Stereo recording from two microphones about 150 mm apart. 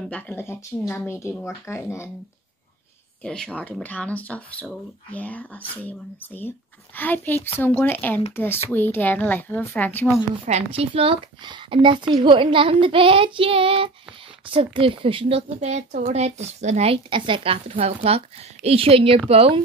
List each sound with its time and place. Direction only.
0.0 s speech: 10° left (ahead or behind)
3.3 s speech: 5° left (ahead or behind)
10.4 s a woman's voice: 45° right (ahead or behind)